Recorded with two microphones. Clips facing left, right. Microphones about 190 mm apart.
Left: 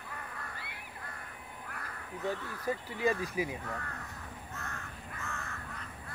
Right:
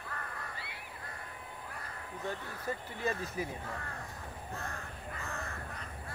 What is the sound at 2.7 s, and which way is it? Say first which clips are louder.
Speech: left 5 dB; 5° left (ahead or behind).